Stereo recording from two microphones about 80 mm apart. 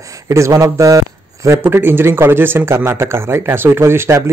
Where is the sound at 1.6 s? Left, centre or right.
Right.